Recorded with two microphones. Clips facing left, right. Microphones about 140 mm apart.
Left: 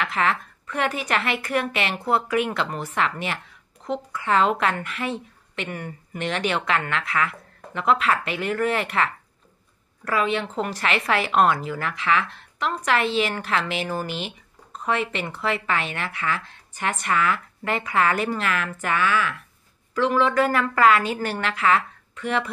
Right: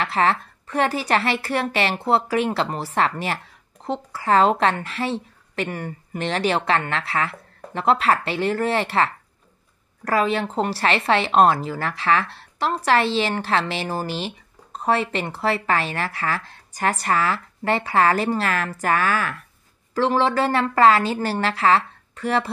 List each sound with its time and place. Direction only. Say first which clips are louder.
0.0 s a woman's voice: right 3 dB; 35° right (ahead or behind)